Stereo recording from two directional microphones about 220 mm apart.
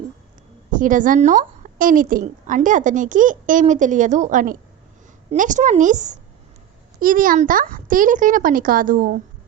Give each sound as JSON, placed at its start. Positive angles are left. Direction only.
{"t": 0.7, "sound": "a woman's voice", "side_deg": -35}